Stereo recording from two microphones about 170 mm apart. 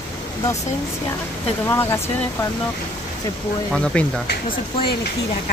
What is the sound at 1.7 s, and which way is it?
Speech, 15° left (ahead or behind).